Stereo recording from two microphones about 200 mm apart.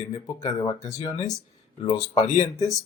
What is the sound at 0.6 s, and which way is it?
Speech, 20° left (ahead or behind).